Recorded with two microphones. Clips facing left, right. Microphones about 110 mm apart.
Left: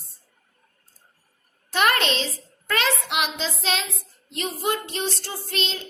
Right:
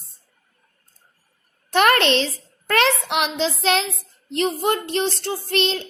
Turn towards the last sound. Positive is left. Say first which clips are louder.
# right 8 dB
turn(degrees=-60)  # may be behind; listen again after turning